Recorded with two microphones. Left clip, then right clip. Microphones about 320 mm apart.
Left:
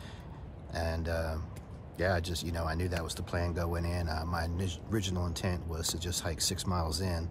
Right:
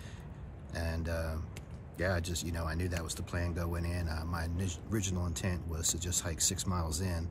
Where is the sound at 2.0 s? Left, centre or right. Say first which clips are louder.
Left 3 dB; centre.